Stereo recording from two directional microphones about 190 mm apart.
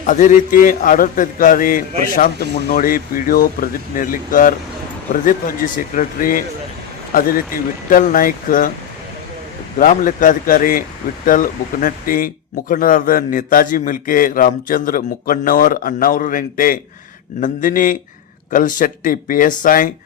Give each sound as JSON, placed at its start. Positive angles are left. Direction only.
{"t": 0.0, "sound": "speech", "side_deg": 40}
{"t": 9.7, "sound": "speech", "side_deg": 45}